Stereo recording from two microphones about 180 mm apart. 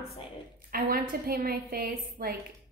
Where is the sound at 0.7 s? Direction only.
55° right (ahead or behind).